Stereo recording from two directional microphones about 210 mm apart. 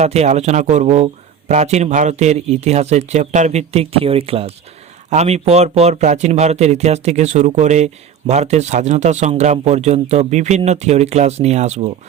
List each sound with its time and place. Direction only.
0.0 s speech: 30° right (ahead or behind)